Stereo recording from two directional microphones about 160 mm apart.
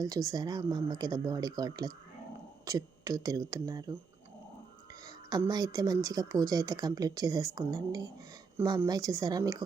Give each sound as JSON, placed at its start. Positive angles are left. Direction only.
{"t": 0.0, "sound": "speech", "side_deg": -20}
{"t": 5.5, "sound": "speech", "side_deg": -25}